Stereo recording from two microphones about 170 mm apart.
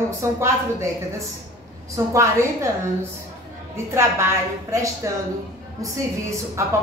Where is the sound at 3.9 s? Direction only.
15° right (ahead or behind).